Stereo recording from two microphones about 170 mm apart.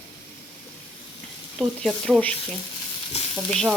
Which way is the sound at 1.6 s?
Centre (ahead or behind).